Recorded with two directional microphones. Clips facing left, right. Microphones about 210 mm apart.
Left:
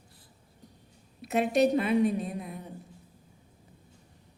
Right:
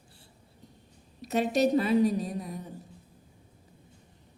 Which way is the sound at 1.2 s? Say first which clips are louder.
Left 1 dB; 35° right (ahead or behind).